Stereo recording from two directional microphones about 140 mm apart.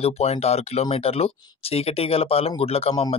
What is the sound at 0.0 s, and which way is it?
Speech, 50° left (ahead or behind).